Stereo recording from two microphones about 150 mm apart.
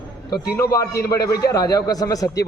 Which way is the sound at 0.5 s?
20° left (ahead or behind).